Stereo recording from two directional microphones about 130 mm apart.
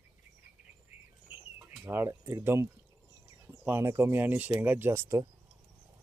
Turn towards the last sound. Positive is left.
turn(degrees=-20)  # may be behind; listen again after turning